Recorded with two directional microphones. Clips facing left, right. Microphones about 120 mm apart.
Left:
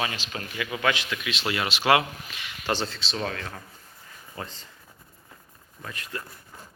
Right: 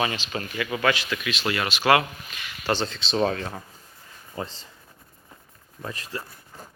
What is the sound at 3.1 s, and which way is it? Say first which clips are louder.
Speech: right 7 dB; 30° right (ahead or behind).